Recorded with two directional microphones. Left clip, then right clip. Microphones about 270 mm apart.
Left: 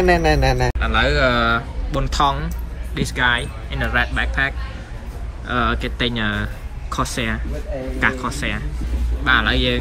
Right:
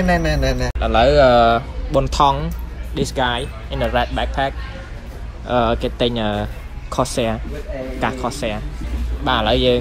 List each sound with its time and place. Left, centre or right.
0.0 s speech: left
0.7 s speech: centre